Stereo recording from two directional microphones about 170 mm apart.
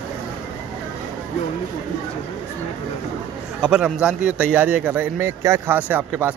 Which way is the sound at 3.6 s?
5° right (ahead or behind).